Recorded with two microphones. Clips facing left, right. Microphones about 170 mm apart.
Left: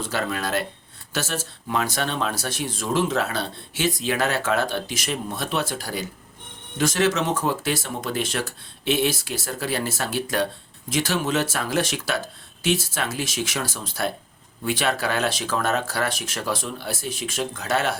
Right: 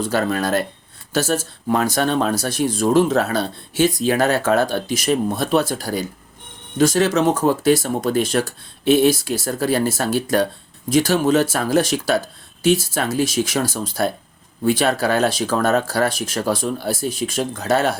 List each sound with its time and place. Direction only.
0.0 s speech: 40° right (ahead or behind)